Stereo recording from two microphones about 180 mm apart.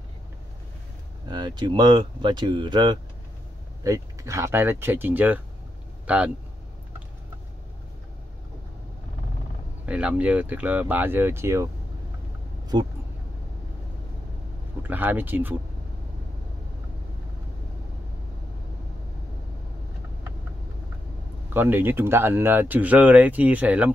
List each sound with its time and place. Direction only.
1.3 s speech: 25° right (ahead or behind); by 6.3 s 5° right (ahead or behind)
9.8 s speech: 5° right (ahead or behind)
12.7 s speech: 25° right (ahead or behind)
14.8 s speech: 10° right (ahead or behind)
21.5 s speech: 10° right (ahead or behind)